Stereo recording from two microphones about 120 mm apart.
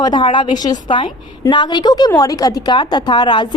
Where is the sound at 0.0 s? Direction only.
40° left (ahead or behind).